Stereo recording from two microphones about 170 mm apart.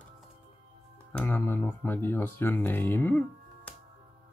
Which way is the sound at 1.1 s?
15° left (ahead or behind).